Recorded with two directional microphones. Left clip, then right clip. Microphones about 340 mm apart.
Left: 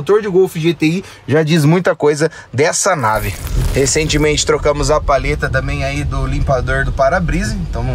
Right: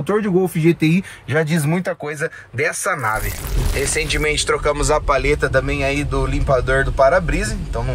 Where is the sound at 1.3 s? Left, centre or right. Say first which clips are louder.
Left 6 dB; centre.